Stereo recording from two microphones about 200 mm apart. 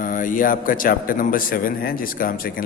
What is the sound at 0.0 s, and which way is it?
A man's voice, 40° left (ahead or behind).